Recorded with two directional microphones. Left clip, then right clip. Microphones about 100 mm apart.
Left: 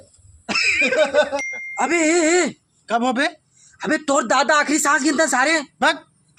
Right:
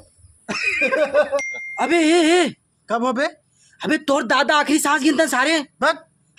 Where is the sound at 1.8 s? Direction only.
40° right (ahead or behind).